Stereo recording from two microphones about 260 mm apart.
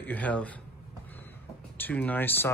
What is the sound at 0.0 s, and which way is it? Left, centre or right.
Speech, centre.